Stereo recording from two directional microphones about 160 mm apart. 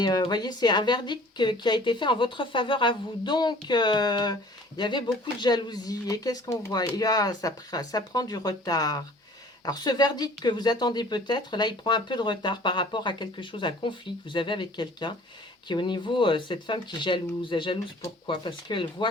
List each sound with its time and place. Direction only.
0.0 s speech: 25° left (ahead or behind)